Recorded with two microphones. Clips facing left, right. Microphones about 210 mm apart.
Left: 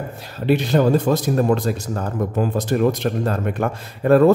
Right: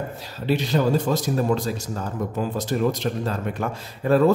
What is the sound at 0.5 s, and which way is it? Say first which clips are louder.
Speech: left 5 dB; 55° left (ahead or behind).